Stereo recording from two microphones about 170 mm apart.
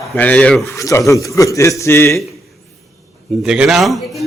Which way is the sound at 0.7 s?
20° left (ahead or behind).